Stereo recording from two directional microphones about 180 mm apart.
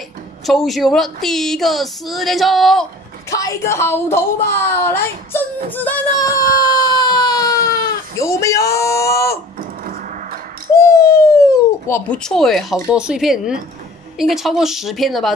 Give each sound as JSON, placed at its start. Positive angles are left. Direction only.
{"t": 0.5, "sound": "speech", "side_deg": 0}
{"t": 3.3, "sound": "speech", "side_deg": 20}
{"t": 5.7, "sound": "baby cry", "side_deg": 10}
{"t": 8.2, "sound": "a sound", "side_deg": 15}
{"t": 10.7, "sound": "bird", "side_deg": 15}
{"t": 12.9, "sound": "speech", "side_deg": -5}